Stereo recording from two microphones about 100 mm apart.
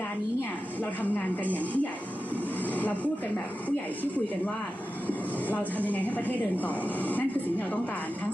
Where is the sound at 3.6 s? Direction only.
15° left (ahead or behind).